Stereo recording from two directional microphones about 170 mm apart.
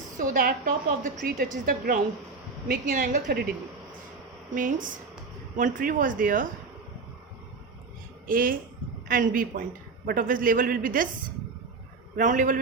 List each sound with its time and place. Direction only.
0.2 s a woman's voice: 55° right (ahead or behind)
4.5 s a woman's voice: 50° right (ahead or behind)
8.3 s a man's voice: 55° right (ahead or behind)
12.1 s a woman's voice: 50° right (ahead or behind)